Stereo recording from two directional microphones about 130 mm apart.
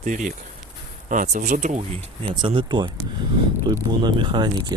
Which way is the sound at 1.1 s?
75° right (ahead or behind).